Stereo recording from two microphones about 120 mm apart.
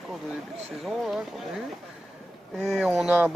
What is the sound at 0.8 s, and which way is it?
Speech, centre (ahead or behind).